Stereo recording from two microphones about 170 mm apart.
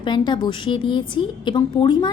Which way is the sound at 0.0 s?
25° left (ahead or behind).